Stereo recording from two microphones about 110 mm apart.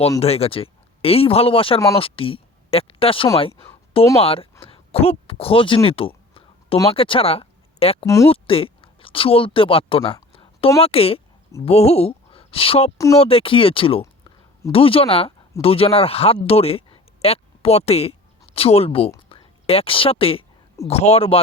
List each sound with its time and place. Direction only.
0.2 s speech: 65° left (ahead or behind)
4.6 s a sound: 60° left (ahead or behind)
6.9 s speech: 55° left (ahead or behind)
8.0 s speech: 25° left (ahead or behind)
8.3 s a woman's voice: 60° left (ahead or behind)
20.8 s speech: 70° left (ahead or behind)